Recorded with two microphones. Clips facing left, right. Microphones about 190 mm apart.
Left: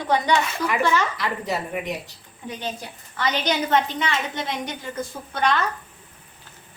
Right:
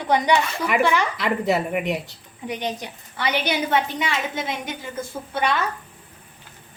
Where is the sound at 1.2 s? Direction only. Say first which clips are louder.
Right 5 dB; 65° right (ahead or behind).